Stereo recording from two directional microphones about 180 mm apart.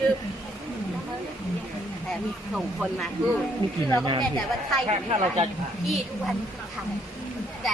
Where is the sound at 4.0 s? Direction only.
25° right (ahead or behind).